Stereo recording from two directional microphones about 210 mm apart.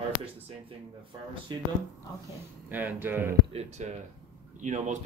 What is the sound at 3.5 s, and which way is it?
Speech, 30° right (ahead or behind).